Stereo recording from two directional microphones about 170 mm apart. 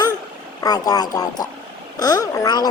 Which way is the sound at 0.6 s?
20° left (ahead or behind).